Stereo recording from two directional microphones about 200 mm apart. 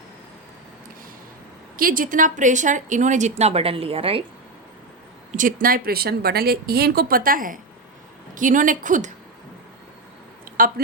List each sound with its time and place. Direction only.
1.7 s speech: 45° right (ahead or behind); by 4.2 s 30° right (ahead or behind)
5.4 s speech: 45° right (ahead or behind)
10.4 s a sound: 45° right (ahead or behind)